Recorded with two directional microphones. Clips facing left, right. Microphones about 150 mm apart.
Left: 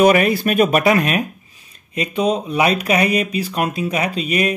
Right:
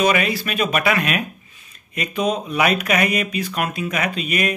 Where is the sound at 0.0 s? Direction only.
50° left (ahead or behind).